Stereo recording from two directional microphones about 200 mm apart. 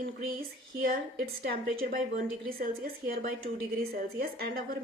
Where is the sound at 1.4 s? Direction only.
45° right (ahead or behind).